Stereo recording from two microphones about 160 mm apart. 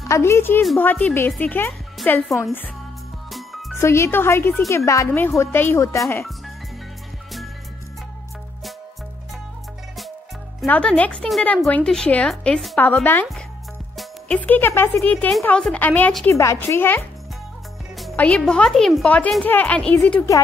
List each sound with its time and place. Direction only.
0.1 s speech: 15° left (ahead or behind)
2.2 s a woman's voice: centre (ahead or behind)
3.3 s music: centre (ahead or behind)
3.7 s speech: 15° left (ahead or behind)
10.7 s speech: 10° left (ahead or behind)
13.9 s music: 10° left (ahead or behind)
15.0 s speech: 10° left (ahead or behind)
16.3 s speech: 15° left (ahead or behind)
18.1 s speech: 10° left (ahead or behind)